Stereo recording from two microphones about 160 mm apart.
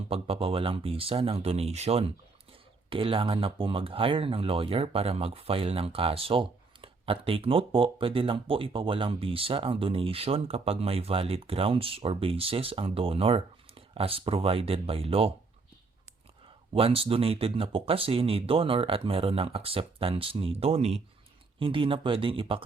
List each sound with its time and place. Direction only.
0.1 s speech: 35° right (ahead or behind)
16.7 s speech: 35° right (ahead or behind)